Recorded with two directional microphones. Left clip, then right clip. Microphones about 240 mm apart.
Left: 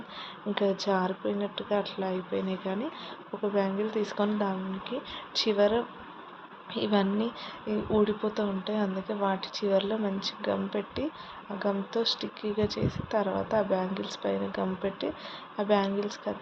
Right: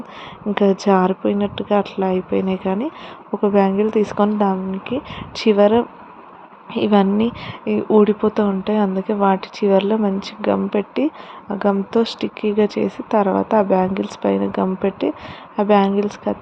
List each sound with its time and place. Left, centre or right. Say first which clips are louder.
0.5 s a woman's voice: right 12 dB; right